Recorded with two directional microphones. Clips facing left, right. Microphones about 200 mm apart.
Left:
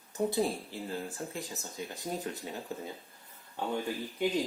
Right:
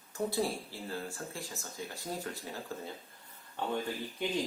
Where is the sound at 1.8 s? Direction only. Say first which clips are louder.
Left 3 dB; 20° left (ahead or behind).